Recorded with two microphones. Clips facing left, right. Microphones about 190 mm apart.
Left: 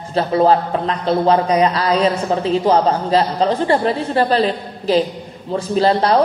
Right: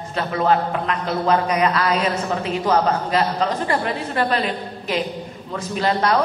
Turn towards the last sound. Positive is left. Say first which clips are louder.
# left 5 dB
turn(degrees=30)  # may be behind; listen again after turning